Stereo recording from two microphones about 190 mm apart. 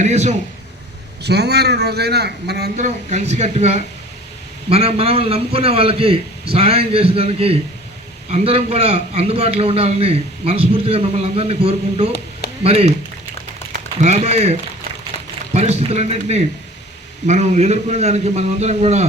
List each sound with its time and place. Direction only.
0.0 s a man's voice: 35° right (ahead or behind)
1.2 s a man's voice: 60° right (ahead or behind)
2.7 s a man's voice: 40° right (ahead or behind)
14.0 s a man's voice: 35° right (ahead or behind)